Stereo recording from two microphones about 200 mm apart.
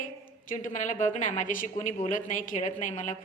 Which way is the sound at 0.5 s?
40° left (ahead or behind).